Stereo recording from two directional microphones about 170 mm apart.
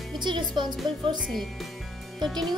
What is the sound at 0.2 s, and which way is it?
Speech, 25° right (ahead or behind).